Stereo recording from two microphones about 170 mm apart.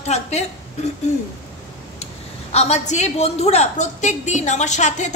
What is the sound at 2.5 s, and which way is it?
A woman's voice, 40° left (ahead or behind).